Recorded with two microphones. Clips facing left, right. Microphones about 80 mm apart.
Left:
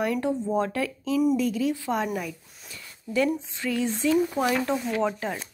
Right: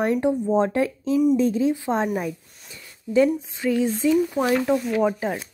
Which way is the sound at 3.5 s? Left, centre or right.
Right.